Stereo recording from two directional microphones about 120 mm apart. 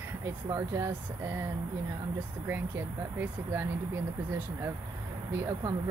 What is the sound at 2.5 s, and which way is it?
Speech, 20° right (ahead or behind).